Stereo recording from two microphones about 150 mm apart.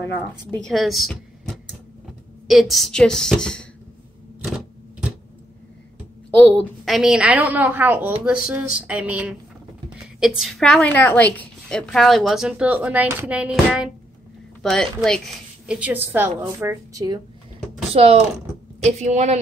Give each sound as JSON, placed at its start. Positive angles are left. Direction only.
{"t": 0.0, "sound": "a woman's voice", "side_deg": 10}
{"t": 6.3, "sound": "a woman's voice", "side_deg": 10}
{"t": 14.6, "sound": "a woman's voice", "side_deg": 5}
{"t": 17.9, "sound": "a woman's voice", "side_deg": -45}